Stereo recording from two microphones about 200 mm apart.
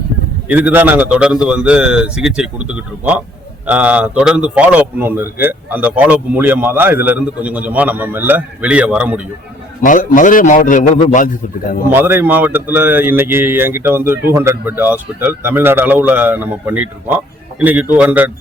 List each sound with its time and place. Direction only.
0.4 s a man's voice: 5° right (ahead or behind)
9.8 s a man's voice: 40° left (ahead or behind)
11.9 s a man's voice: 10° right (ahead or behind)